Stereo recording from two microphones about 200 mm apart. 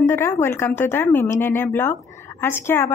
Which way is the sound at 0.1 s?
15° left (ahead or behind).